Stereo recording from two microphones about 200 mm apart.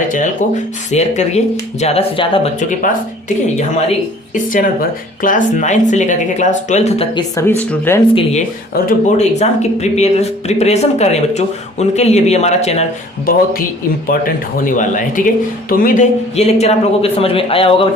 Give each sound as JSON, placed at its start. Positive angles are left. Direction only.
{"t": 0.9, "sound": "speech", "side_deg": 35}
{"t": 2.6, "sound": "speech", "side_deg": 40}
{"t": 8.1, "sound": "speech", "side_deg": 35}
{"t": 13.2, "sound": "speech", "side_deg": 45}